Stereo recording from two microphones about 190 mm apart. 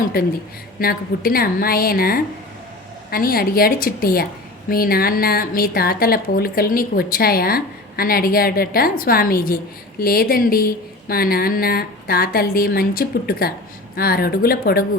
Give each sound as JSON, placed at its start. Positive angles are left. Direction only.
{"t": 0.0, "sound": "speech", "side_deg": 50}